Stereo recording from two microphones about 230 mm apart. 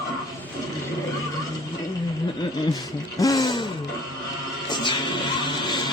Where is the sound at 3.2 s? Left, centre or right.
Centre.